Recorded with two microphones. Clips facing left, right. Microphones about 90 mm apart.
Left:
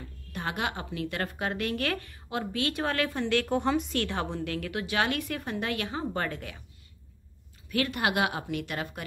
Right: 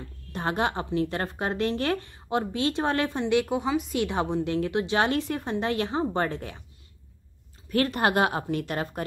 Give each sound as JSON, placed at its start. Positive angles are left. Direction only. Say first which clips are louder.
{"t": 0.3, "sound": "a woman's voice", "louder": "right 5 dB", "side_deg": -35}
{"t": 3.5, "sound": "a woman's voice", "louder": "even", "side_deg": -5}
{"t": 4.0, "sound": "a woman's voice", "louder": "right 5 dB", "side_deg": -15}
{"t": 7.7, "sound": "a woman's voice", "louder": "right 4 dB", "side_deg": -40}